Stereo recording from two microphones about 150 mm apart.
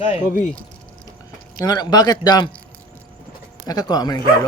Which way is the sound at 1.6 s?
25° left (ahead or behind).